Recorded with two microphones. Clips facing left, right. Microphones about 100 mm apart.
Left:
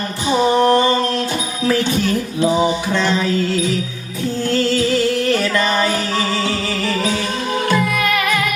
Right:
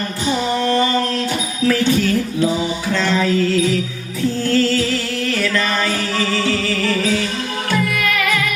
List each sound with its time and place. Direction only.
1.6 s music: 25° left (ahead or behind)